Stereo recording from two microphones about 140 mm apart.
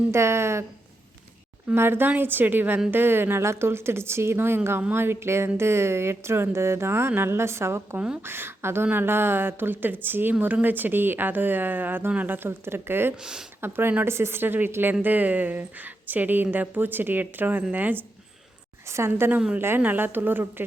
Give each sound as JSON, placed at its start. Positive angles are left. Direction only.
{"t": 0.1, "sound": "speech", "side_deg": -20}
{"t": 1.6, "sound": "a woman's voice", "side_deg": -15}
{"t": 13.1, "sound": "speech", "side_deg": -5}
{"t": 13.6, "sound": "a woman's voice", "side_deg": -15}